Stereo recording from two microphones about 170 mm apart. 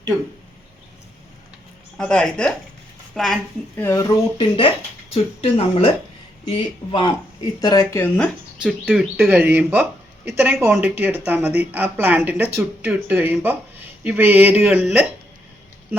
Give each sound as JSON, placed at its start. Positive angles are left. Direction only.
{"t": 2.0, "sound": "speech", "side_deg": 5}
{"t": 3.8, "sound": "speech", "side_deg": 15}
{"t": 7.6, "sound": "speech", "side_deg": 20}
{"t": 8.9, "sound": "speech", "side_deg": -10}